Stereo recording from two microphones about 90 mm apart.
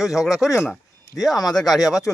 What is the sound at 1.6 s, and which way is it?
Speech, 45° left (ahead or behind).